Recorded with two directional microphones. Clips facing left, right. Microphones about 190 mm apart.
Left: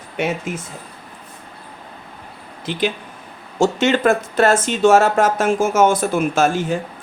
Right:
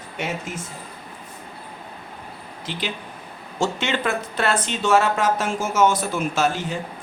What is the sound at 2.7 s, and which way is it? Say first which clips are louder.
Speech: left 8 dB; 50° left (ahead or behind).